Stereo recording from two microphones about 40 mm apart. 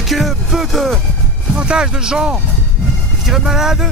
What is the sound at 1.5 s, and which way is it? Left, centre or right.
Speech, right.